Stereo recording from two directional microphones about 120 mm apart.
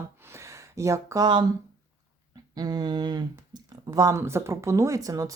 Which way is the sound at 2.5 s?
35° right (ahead or behind).